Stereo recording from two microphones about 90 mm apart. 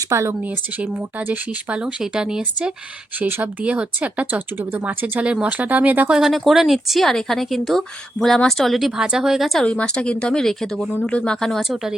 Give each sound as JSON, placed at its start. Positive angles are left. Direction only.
{"t": 0.1, "sound": "speech", "side_deg": -30}
{"t": 1.3, "sound": "speech", "side_deg": -15}
{"t": 3.2, "sound": "speech", "side_deg": -20}
{"t": 6.1, "sound": "speech", "side_deg": 0}
{"t": 9.6, "sound": "speech", "side_deg": 10}